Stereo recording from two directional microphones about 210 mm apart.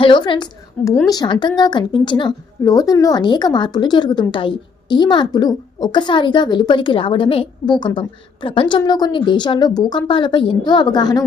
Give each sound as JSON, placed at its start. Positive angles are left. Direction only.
{"t": 0.0, "sound": "a woman's voice", "side_deg": 25}